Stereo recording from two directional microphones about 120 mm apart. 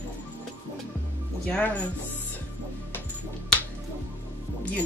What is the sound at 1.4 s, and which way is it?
Speech, 10° left (ahead or behind).